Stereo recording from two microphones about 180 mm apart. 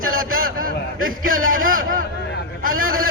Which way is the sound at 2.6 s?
55° right (ahead or behind).